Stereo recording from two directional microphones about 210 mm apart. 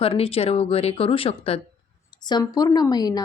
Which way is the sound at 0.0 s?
25° left (ahead or behind).